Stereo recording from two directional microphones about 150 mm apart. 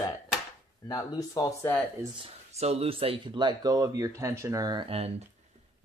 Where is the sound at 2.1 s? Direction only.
40° right (ahead or behind).